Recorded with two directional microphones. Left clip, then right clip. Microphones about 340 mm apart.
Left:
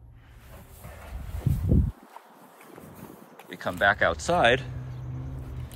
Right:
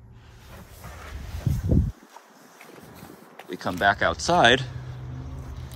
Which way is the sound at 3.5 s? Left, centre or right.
Centre.